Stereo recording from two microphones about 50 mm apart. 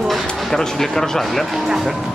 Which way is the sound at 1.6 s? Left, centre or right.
Centre.